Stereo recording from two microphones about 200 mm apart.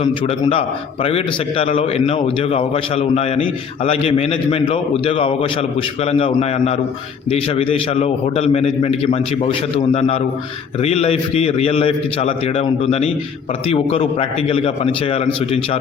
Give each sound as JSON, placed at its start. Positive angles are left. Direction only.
{"t": 1.0, "sound": "a man's voice", "side_deg": 30}